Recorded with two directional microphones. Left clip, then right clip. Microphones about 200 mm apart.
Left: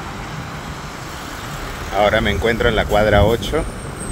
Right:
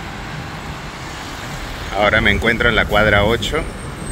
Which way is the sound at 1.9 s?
15° left (ahead or behind).